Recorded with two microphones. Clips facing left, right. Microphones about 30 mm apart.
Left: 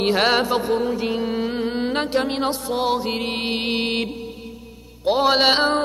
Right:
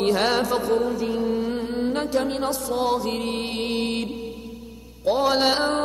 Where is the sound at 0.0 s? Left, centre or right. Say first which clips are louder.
Left 2 dB; left.